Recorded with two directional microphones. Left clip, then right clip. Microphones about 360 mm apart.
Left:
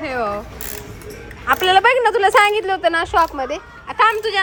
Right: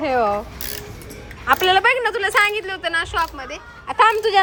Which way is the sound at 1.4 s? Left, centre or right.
Centre.